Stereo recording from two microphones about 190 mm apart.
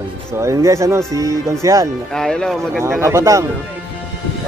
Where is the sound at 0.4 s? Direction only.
15° right (ahead or behind).